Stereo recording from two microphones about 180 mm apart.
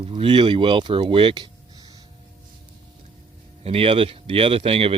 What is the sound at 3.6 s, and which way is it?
Speech, 30° right (ahead or behind).